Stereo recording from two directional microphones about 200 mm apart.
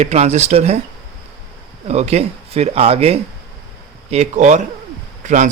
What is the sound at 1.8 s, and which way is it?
Speech, 30° right (ahead or behind).